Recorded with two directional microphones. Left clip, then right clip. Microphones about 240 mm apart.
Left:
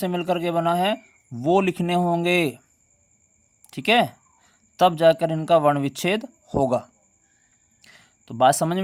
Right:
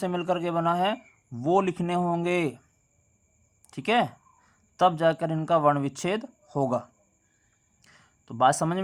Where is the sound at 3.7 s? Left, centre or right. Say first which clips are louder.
Left 5 dB; left.